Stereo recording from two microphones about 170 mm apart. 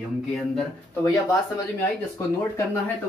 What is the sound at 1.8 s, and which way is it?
Speech, 15° left (ahead or behind).